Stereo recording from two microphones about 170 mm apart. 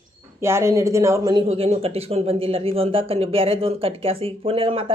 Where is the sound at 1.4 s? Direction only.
35° right (ahead or behind).